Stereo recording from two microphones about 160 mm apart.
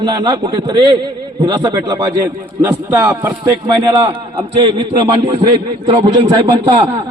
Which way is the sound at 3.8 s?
30° right (ahead or behind).